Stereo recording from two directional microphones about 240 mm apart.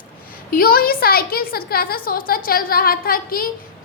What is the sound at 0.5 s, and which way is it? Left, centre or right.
A woman's voice, left.